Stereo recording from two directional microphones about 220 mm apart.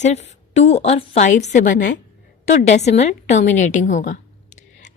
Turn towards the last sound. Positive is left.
turn(degrees=35)  # may be behind; listen again after turning